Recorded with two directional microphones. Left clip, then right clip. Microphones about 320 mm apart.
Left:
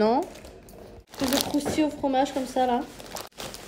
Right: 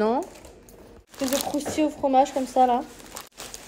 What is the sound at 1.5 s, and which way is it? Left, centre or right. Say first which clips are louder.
Speech: even; centre.